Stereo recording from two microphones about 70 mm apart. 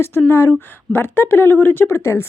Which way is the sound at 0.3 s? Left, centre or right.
Left.